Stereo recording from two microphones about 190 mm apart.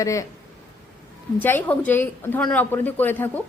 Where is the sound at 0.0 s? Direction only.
15° left (ahead or behind).